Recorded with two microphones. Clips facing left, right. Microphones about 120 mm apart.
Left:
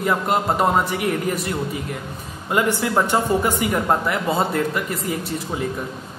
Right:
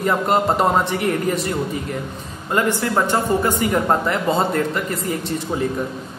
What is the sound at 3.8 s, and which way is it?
A man's voice, centre (ahead or behind).